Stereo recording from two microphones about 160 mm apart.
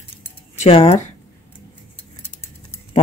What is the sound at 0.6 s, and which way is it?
Speech, 35° left (ahead or behind).